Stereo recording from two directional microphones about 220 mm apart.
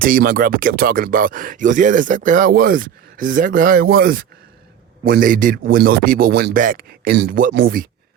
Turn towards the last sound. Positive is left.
turn(degrees=-45)  # may be behind; listen again after turning